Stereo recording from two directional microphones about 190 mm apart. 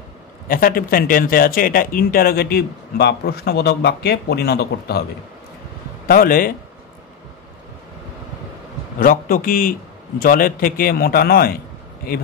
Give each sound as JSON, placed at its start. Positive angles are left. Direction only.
{"t": 0.5, "sound": "speech", "side_deg": 50}
{"t": 6.0, "sound": "speech", "side_deg": 50}
{"t": 9.0, "sound": "speech", "side_deg": 45}